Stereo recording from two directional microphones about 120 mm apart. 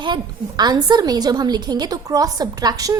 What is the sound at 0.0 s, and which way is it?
A woman's voice, 35° right (ahead or behind).